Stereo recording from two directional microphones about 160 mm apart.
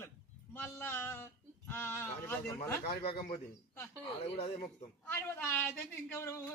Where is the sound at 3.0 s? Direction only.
65° left (ahead or behind).